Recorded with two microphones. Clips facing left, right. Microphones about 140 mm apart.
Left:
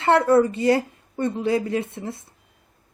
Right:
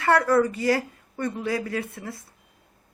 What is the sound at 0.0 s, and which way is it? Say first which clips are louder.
A woman's voice: left 3 dB; 25° left (ahead or behind).